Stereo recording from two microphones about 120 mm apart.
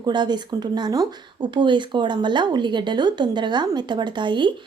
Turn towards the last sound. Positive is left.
turn(degrees=-40)  # may be behind; listen again after turning